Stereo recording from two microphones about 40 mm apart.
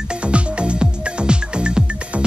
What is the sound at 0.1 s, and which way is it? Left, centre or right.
Music, right.